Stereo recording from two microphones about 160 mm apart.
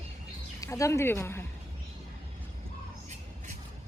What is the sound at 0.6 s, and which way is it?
Speech, 20° left (ahead or behind).